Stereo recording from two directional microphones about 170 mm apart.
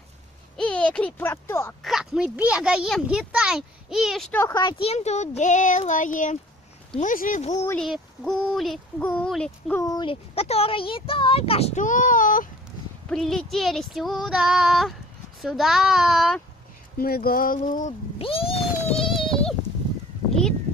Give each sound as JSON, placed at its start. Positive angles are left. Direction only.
{"t": 0.6, "sound": "a child's voice", "side_deg": 5}
{"t": 1.8, "sound": "a child's voice", "side_deg": 0}
{"t": 4.3, "sound": "speech", "side_deg": 15}
{"t": 7.8, "sound": "a child's voice", "side_deg": 0}
{"t": 9.8, "sound": "speech", "side_deg": 25}
{"t": 10.3, "sound": "a child's voice", "side_deg": 35}
{"t": 13.1, "sound": "a child's voice", "side_deg": 5}
{"t": 17.0, "sound": "a sound", "side_deg": 60}
{"t": 18.2, "sound": "cat", "side_deg": 35}
{"t": 18.9, "sound": "a sound", "side_deg": 0}